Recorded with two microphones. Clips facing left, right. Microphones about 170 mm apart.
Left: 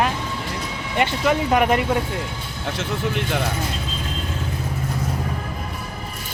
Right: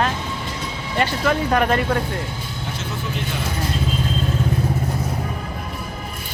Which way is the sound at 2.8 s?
65° left (ahead or behind).